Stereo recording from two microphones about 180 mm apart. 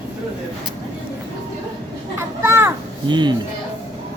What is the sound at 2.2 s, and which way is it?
Children playing, 15° right (ahead or behind).